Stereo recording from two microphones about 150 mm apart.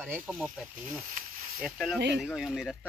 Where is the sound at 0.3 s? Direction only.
Centre (ahead or behind).